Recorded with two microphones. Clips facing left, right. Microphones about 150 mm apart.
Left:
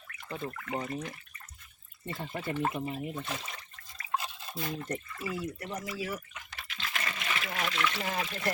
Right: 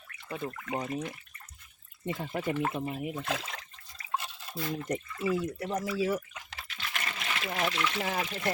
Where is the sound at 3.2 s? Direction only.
90° right.